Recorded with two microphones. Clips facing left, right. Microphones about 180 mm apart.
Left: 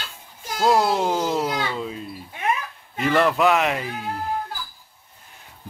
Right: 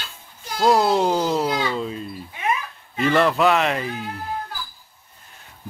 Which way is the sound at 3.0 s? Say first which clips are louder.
Right 1 dB; 10° left (ahead or behind).